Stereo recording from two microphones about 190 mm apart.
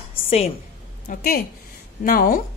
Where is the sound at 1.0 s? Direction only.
50° left (ahead or behind).